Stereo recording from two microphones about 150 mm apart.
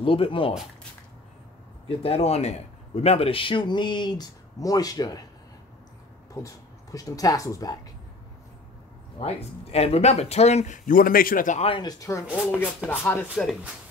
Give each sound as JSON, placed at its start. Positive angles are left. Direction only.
{"t": 0.0, "sound": "a man's voice", "side_deg": 35}
{"t": 1.9, "sound": "a man's voice", "side_deg": 40}
{"t": 6.3, "sound": "speech", "side_deg": 20}
{"t": 9.2, "sound": "speech", "side_deg": 45}
{"t": 11.6, "sound": "a man's voice", "side_deg": 35}
{"t": 12.0, "sound": "speech", "side_deg": 20}
{"t": 12.3, "sound": "speech", "side_deg": -5}
{"t": 12.5, "sound": "speech", "side_deg": 10}